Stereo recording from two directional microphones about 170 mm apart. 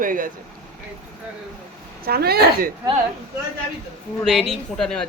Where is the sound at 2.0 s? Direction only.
65° right (ahead or behind).